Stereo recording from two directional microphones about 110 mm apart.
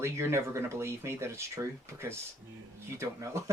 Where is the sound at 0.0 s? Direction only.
25° right (ahead or behind).